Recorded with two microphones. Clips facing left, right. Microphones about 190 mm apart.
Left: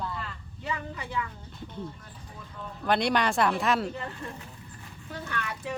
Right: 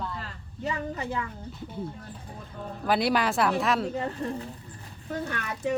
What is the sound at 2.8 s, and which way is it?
Speech, 5° right (ahead or behind).